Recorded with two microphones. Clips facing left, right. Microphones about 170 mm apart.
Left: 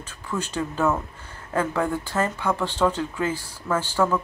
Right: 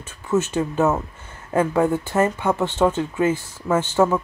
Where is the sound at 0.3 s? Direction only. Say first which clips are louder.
Right 7 dB; 20° right (ahead or behind).